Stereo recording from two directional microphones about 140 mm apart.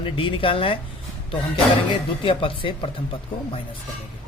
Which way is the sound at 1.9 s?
40° left (ahead or behind).